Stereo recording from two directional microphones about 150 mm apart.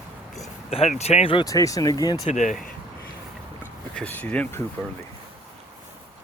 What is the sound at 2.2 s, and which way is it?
Speech, 55° left (ahead or behind).